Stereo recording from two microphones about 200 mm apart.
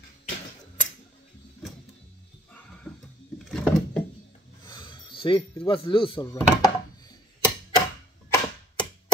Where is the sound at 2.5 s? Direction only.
5° left (ahead or behind).